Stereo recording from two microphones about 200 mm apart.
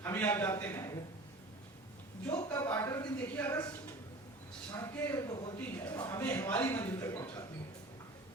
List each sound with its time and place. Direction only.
0.0 s a man's voice: 10° left (ahead or behind)
2.2 s a man's voice: 10° left (ahead or behind)
4.7 s a man's voice: 15° left (ahead or behind)